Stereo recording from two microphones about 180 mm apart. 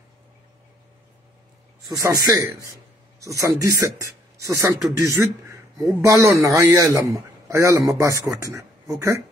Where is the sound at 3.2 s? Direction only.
15° right (ahead or behind).